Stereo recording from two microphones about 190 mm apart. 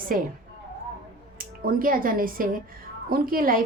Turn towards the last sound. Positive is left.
turn(degrees=-50)  # may be behind; listen again after turning